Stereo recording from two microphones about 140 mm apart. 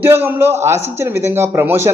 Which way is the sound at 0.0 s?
15° right (ahead or behind).